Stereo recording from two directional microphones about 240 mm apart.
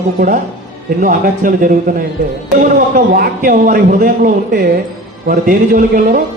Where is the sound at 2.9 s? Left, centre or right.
Right.